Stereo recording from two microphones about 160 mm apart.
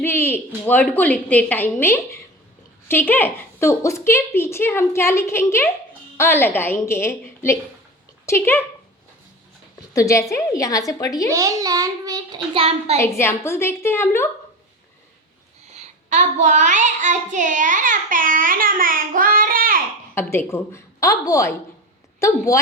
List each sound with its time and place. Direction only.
0.0 s a woman's voice: 15° left (ahead or behind)
9.9 s a woman's voice: 20° left (ahead or behind)
11.3 s a child's voice: 20° right (ahead or behind)
12.5 s a woman's voice: 40° right (ahead or behind)
13.0 s a woman's voice: 15° left (ahead or behind)
15.7 s child singing: 45° right (ahead or behind); by 19.8 s 65° right (ahead or behind)
20.1 s a woman's voice: 15° left (ahead or behind)